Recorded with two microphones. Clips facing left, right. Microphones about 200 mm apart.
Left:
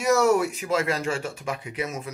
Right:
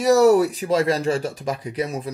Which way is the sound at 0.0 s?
35° right (ahead or behind).